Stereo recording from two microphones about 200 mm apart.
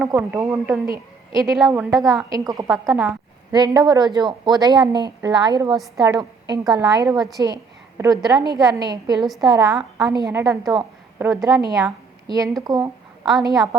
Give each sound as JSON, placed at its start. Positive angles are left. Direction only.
{"t": 0.0, "sound": "a woman's voice", "side_deg": -10}
{"t": 1.4, "sound": "a woman's voice", "side_deg": 0}
{"t": 1.7, "sound": "a woman's voice", "side_deg": -15}
{"t": 2.6, "sound": "a woman's voice", "side_deg": 0}
{"t": 3.5, "sound": "a woman's voice", "side_deg": -20}